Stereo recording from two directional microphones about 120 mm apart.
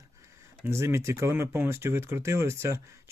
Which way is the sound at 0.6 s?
20° right (ahead or behind).